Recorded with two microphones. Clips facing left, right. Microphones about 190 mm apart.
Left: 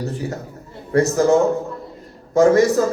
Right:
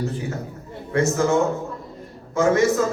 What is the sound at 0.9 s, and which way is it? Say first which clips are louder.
A man's voice: left 4 dB; 35° left (ahead or behind).